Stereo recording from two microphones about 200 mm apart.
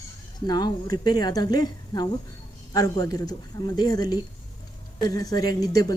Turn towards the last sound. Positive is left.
turn(degrees=20)  # may be behind; listen again after turning